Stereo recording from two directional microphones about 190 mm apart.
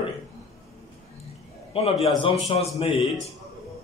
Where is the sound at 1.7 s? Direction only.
30° left (ahead or behind).